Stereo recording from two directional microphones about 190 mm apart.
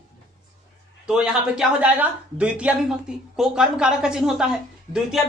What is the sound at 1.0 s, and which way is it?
Speech, 5° right (ahead or behind).